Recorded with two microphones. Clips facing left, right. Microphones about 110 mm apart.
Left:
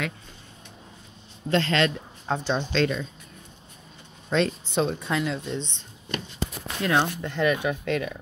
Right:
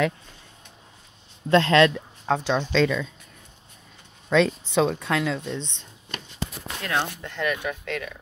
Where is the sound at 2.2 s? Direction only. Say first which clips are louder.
Right 3 dB; 90° right.